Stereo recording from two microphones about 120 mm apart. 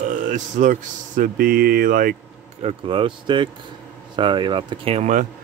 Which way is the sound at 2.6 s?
45° right (ahead or behind).